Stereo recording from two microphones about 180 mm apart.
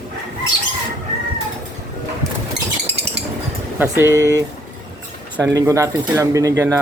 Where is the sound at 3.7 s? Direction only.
10° right (ahead or behind).